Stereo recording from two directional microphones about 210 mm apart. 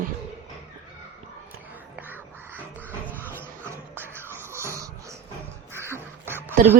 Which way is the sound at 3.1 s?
10° left (ahead or behind).